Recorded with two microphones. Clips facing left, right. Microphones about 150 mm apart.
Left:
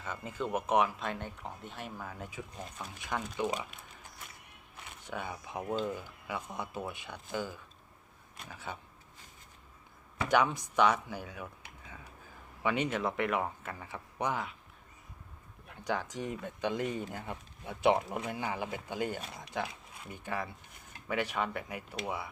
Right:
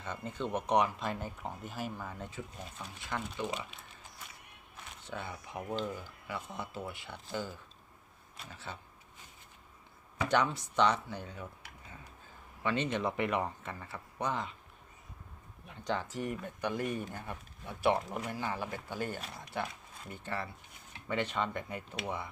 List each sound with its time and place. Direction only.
0.0 s speech: 5° left (ahead or behind)
5.0 s speech: 15° left (ahead or behind)
10.2 s speech: 10° left (ahead or behind)
12.6 s speech: 10° left (ahead or behind)
13.0 s speech: centre (ahead or behind)
15.8 s speech: 10° left (ahead or behind)